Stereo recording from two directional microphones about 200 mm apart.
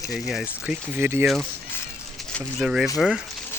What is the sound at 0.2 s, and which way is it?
Speech, centre (ahead or behind).